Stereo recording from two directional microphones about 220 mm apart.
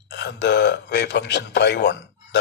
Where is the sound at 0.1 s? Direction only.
50° left (ahead or behind).